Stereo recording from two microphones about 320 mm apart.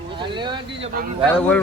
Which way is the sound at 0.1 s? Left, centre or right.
Centre.